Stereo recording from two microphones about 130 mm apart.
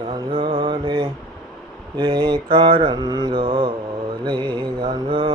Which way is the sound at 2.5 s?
45° right (ahead or behind).